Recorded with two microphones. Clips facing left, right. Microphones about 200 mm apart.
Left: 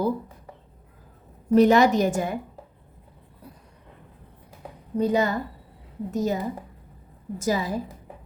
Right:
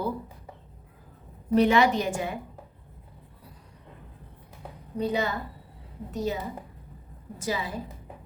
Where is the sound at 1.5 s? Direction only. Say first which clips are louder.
Left 4 dB; 40° left (ahead or behind).